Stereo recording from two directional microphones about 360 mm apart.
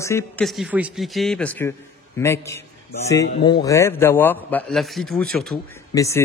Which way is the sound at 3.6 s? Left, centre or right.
Centre.